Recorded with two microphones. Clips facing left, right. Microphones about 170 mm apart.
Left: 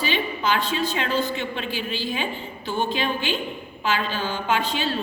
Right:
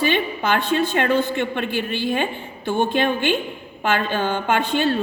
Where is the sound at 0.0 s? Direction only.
55° right (ahead or behind).